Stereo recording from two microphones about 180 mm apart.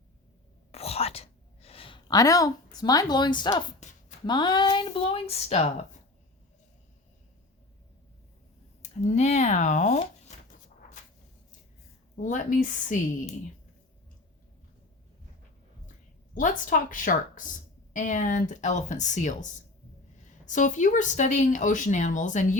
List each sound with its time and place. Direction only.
0.7 s whispering: 35° left (ahead or behind)
4.3 s speech: 25° left (ahead or behind)
8.8 s speech: 40° left (ahead or behind)
12.1 s speech: 45° left (ahead or behind)
16.3 s speech: 45° left (ahead or behind)